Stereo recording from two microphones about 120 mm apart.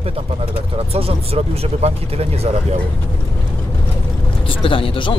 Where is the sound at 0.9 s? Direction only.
55° right (ahead or behind).